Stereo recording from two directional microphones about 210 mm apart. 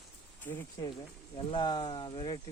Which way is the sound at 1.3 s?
20° left (ahead or behind).